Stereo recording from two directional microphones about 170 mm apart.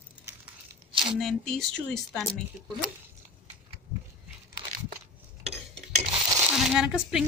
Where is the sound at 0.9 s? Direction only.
30° right (ahead or behind).